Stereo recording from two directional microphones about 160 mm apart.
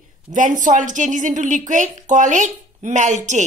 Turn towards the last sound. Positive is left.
turn(degrees=-50)  # may be behind; listen again after turning